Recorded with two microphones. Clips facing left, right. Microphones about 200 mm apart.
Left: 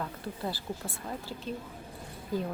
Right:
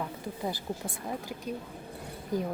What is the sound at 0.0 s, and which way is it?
A woman's voice, 15° right (ahead or behind).